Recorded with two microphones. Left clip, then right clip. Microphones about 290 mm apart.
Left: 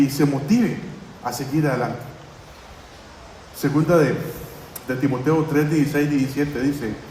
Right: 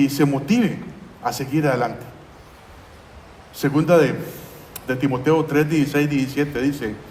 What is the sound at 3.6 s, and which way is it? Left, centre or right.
A man's voice, right.